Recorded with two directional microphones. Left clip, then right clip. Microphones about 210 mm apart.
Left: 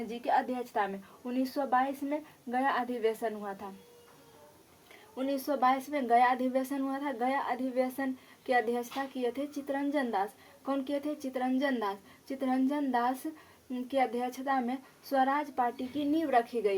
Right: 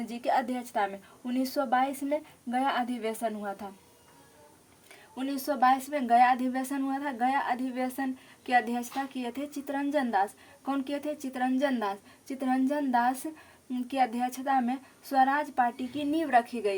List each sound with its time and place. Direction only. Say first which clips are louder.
0.1 s a woman's voice: right 1 dB; 55° right (ahead or behind)
5.1 s a woman's voice: even; 45° right (ahead or behind)